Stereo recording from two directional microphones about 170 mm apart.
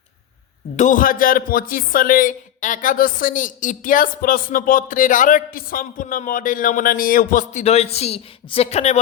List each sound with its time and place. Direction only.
0.8 s a man's voice: 50° left (ahead or behind)